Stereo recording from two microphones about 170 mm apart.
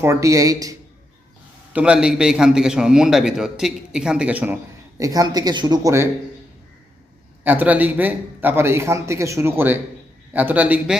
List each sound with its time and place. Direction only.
0.0 s speech: 15° right (ahead or behind)
1.7 s a man's voice: 5° right (ahead or behind)
4.9 s speech: 20° right (ahead or behind)
7.4 s speech: 10° right (ahead or behind)